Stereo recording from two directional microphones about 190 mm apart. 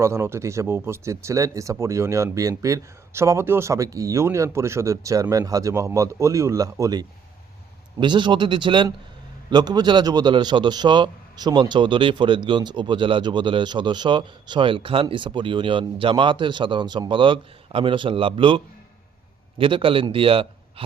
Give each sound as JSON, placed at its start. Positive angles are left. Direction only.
{"t": 0.0, "sound": "a man's voice", "side_deg": -15}